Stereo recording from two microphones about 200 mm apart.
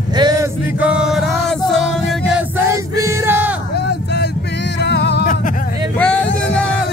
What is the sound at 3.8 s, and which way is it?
Vehicle, 55° left (ahead or behind).